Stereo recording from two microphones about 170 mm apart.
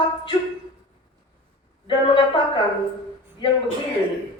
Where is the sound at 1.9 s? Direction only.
30° left (ahead or behind).